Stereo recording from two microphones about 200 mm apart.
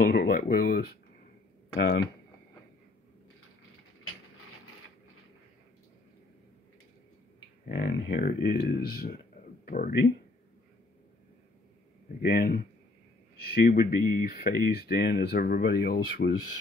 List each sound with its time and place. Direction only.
0.0 s speech: 50° left (ahead or behind)
7.6 s speech: 45° left (ahead or behind)
12.2 s speech: 50° left (ahead or behind)